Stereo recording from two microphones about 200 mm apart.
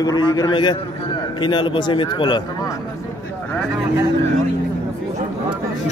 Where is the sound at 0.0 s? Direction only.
20° left (ahead or behind).